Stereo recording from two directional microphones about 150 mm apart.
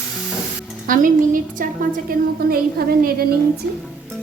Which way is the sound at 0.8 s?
65° right (ahead or behind).